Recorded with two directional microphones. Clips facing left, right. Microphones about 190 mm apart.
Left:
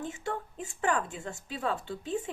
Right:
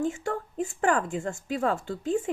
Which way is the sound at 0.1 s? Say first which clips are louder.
Right 4 dB; 45° right (ahead or behind).